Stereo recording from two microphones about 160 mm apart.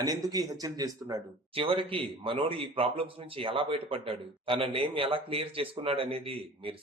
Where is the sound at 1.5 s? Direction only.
35° right (ahead or behind).